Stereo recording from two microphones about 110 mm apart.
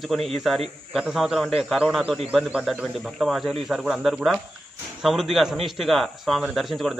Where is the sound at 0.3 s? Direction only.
Centre (ahead or behind).